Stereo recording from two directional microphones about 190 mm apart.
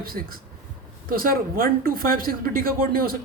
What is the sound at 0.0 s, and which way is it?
A woman's voice, 50° right (ahead or behind).